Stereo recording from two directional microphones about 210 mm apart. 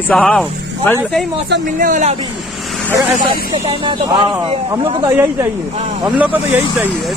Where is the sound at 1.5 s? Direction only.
40° right (ahead or behind).